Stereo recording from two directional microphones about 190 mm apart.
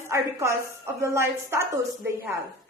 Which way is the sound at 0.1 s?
15° right (ahead or behind).